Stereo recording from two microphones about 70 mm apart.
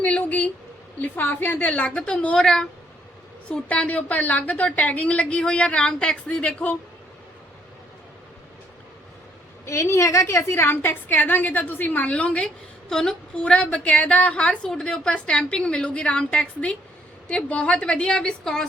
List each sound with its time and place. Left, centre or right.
0.0 s a sound: left
1.0 s a woman's voice: left
9.6 s a woman's voice: left; by 18.7 s centre